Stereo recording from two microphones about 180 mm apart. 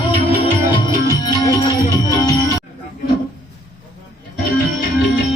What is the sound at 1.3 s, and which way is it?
Music, 20° left (ahead or behind).